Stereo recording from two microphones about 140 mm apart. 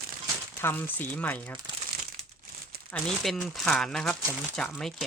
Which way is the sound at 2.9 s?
5° left (ahead or behind).